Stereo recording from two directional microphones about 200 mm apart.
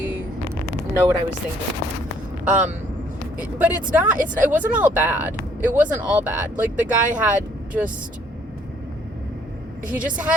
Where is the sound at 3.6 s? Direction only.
10° right (ahead or behind).